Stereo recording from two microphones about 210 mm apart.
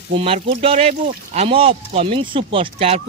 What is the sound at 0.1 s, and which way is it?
Speech, 25° right (ahead or behind).